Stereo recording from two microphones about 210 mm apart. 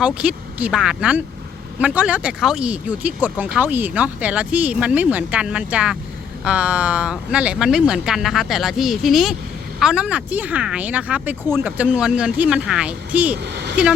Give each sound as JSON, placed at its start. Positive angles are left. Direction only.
{"t": 0.0, "sound": "speech", "side_deg": -5}
{"t": 13.4, "sound": "speech", "side_deg": -55}